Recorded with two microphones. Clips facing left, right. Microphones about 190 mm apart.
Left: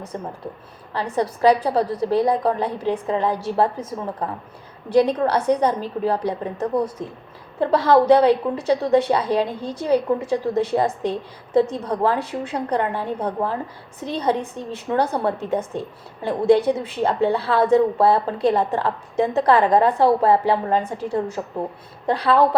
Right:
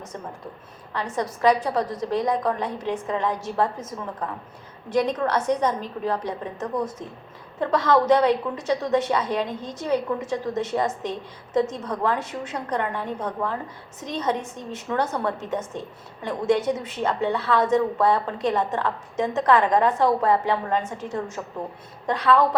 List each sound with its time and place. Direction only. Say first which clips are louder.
0.1 s a woman's voice: left 6 dB; 35° left (ahead or behind)